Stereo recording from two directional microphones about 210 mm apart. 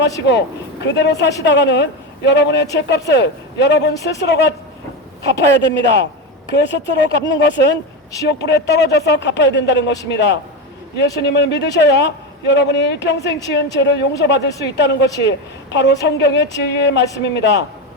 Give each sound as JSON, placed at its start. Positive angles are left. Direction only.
{"t": 0.3, "sound": "a man's voice", "side_deg": 55}